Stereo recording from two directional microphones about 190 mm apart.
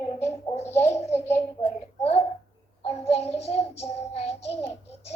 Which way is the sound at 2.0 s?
30° left (ahead or behind).